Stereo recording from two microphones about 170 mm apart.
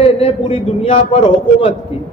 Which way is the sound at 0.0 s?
30° left (ahead or behind).